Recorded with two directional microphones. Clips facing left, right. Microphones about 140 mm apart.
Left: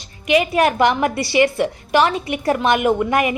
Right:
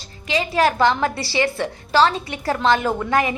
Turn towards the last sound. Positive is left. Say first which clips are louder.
# left 3 dB
turn(degrees=15)  # may be behind; listen again after turning